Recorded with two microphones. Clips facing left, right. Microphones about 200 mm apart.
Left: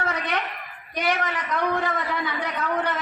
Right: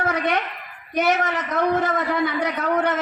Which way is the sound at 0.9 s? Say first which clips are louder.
Right 5 dB; 45° right (ahead or behind).